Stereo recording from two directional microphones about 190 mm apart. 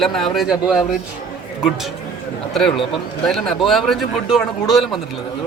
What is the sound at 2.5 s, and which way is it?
A man's voice, centre (ahead or behind).